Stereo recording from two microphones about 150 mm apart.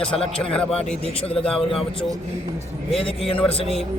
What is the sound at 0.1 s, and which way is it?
Speech, 40° left (ahead or behind).